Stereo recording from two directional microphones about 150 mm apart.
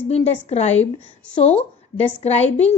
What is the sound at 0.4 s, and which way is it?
A woman's voice, 45° left (ahead or behind).